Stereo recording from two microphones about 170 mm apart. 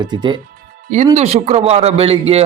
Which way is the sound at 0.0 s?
25° right (ahead or behind).